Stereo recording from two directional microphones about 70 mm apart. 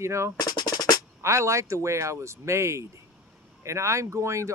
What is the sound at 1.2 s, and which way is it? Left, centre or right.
Speech, right.